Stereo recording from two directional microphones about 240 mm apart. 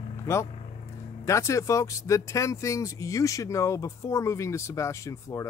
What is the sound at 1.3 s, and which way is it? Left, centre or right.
Speech, centre.